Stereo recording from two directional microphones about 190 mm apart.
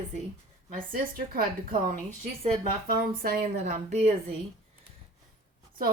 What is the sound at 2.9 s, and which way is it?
Speech, 50° right (ahead or behind).